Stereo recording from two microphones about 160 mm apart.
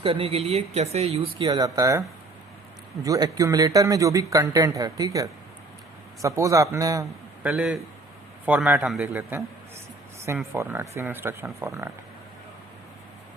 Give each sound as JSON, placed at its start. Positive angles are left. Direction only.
{"t": 0.0, "sound": "speech", "side_deg": -35}
{"t": 1.5, "sound": "speech", "side_deg": -25}
{"t": 7.4, "sound": "a man's voice", "side_deg": 0}